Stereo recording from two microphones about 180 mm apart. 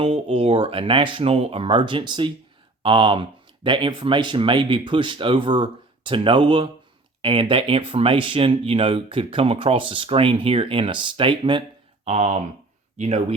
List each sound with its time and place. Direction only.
0.0 s speech: 30° right (ahead or behind)